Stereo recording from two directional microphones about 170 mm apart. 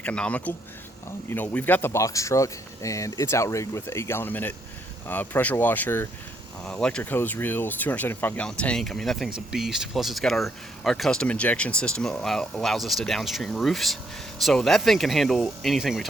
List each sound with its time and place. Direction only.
0.0 s speech: 5° left (ahead or behind)